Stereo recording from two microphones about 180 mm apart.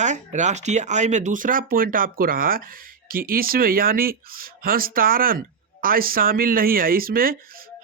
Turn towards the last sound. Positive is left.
turn(degrees=-55)  # may be behind; listen again after turning